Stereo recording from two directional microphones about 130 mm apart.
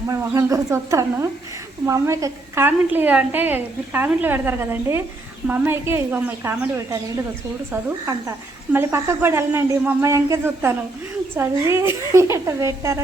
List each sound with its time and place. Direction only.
0.1 s a woman's voice: 25° right (ahead or behind)